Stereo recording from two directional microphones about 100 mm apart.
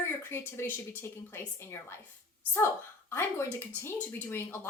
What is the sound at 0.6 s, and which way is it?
A woman's voice, 25° left (ahead or behind).